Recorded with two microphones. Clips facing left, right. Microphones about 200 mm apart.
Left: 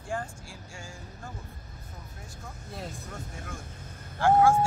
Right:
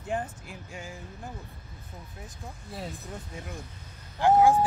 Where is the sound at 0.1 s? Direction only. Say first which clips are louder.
Right 3 dB; 20° right (ahead or behind).